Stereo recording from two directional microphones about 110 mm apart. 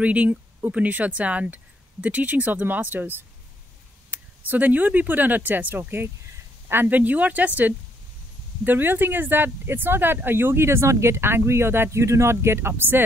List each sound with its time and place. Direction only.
0.0 s speech: 10° right (ahead or behind)